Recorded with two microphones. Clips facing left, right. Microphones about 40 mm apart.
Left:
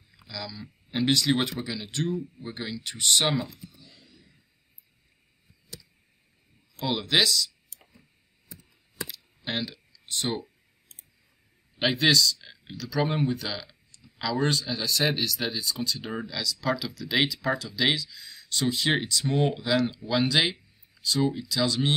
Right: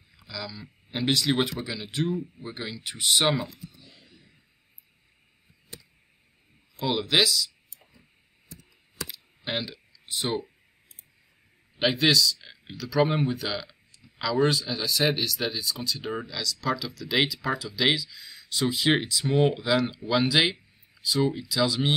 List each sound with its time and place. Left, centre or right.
0.3 s speech: centre
3.8 s a sound: right
6.9 s speech: centre
9.0 s computer keyboard: centre
11.8 s speech: centre